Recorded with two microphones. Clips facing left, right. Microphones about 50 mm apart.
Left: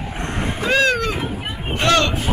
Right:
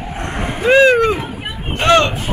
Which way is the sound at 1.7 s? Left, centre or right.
Right.